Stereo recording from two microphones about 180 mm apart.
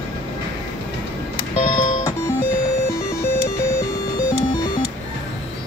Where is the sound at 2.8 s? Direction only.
15° left (ahead or behind).